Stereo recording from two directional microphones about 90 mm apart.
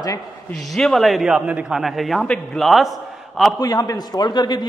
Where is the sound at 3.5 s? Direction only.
45° left (ahead or behind).